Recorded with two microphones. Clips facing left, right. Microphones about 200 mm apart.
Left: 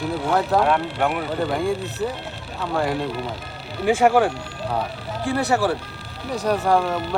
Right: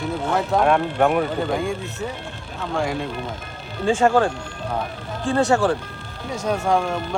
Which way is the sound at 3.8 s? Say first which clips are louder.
Left 1 dB; 15° left (ahead or behind).